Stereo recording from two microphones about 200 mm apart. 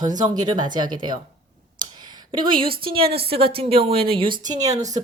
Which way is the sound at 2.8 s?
25° right (ahead or behind).